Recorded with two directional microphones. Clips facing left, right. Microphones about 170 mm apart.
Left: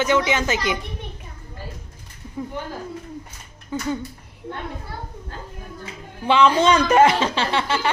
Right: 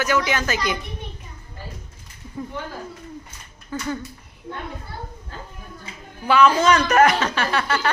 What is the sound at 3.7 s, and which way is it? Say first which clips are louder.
Speech: left 2 dB; 15° left (ahead or behind).